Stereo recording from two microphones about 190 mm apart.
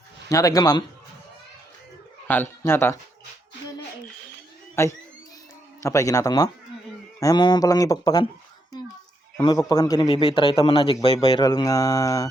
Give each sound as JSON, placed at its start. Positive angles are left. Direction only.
{"t": 0.3, "sound": "a man's voice", "side_deg": 20}
{"t": 2.2, "sound": "speech", "side_deg": 10}
{"t": 4.7, "sound": "a man's voice", "side_deg": 15}
{"t": 9.4, "sound": "a man's voice", "side_deg": 20}